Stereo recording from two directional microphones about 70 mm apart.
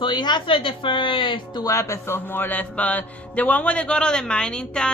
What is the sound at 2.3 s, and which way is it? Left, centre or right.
A man's voice, left.